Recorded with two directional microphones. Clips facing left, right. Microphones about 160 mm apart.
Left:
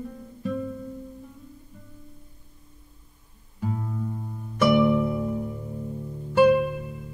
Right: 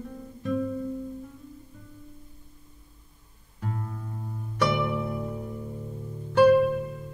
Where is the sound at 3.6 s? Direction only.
5° left (ahead or behind).